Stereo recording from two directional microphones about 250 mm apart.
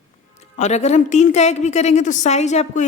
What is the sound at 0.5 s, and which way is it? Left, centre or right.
A woman's voice, left.